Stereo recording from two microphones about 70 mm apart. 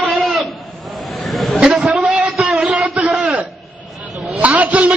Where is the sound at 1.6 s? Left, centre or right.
Centre.